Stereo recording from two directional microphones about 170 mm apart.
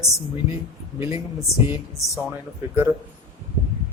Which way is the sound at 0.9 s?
15° right (ahead or behind).